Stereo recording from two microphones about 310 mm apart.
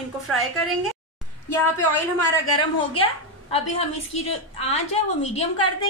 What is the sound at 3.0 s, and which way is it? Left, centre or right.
A woman's voice, centre.